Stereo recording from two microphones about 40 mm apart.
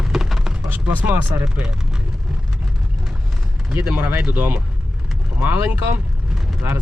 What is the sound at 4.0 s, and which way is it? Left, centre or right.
Speech, right.